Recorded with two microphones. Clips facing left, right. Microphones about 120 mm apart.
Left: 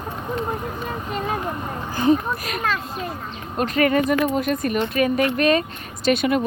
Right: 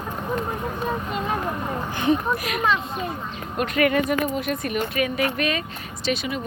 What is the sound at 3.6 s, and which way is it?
Speech, 35° left (ahead or behind).